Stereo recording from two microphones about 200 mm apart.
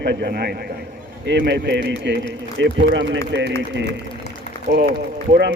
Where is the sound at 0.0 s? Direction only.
55° right (ahead or behind).